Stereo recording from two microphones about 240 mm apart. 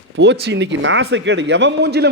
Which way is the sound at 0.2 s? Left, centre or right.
Right.